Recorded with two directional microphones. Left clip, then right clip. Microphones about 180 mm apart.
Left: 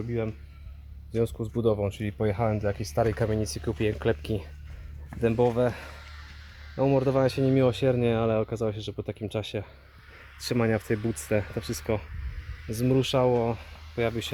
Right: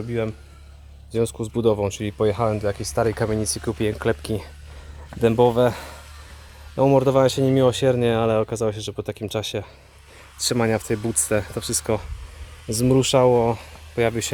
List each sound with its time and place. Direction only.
1.1 s speech: 10° right (ahead or behind)
5.2 s speech: 30° right (ahead or behind); by 11.9 s 10° right (ahead or behind)
12.7 s speech: 25° right (ahead or behind)